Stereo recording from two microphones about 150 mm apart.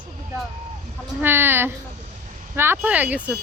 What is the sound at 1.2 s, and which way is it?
Speech, 15° right (ahead or behind).